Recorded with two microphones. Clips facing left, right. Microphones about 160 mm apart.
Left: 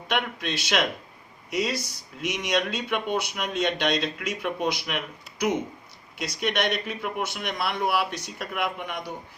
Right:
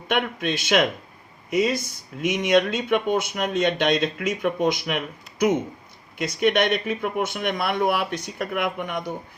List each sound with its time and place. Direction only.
0.1 s speech: 50° right (ahead or behind)
6.1 s speech: 50° right (ahead or behind)